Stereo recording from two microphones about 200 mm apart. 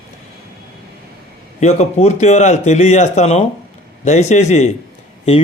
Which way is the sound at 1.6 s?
35° left (ahead or behind).